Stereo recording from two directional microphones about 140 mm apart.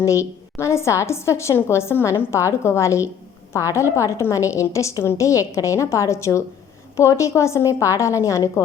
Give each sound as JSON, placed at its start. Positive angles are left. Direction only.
{"t": 0.0, "sound": "a woman's voice", "side_deg": 20}